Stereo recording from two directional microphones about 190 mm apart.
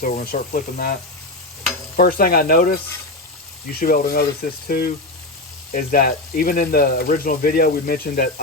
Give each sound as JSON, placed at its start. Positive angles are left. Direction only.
{"t": 0.0, "sound": "speech", "side_deg": 50}
{"t": 2.0, "sound": "speech", "side_deg": 50}
{"t": 5.7, "sound": "speech", "side_deg": 50}